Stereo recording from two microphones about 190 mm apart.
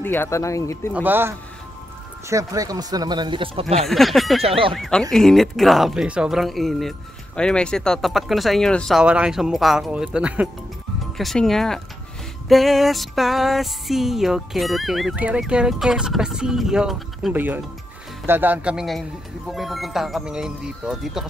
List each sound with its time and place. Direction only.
0.0 s speech: 10° left (ahead or behind)
0.9 s speech: 10° right (ahead or behind); by 3.6 s 25° right (ahead or behind)
3.8 s speech: centre (ahead or behind)
4.4 s speech: 30° right (ahead or behind)
4.7 s speech: centre (ahead or behind)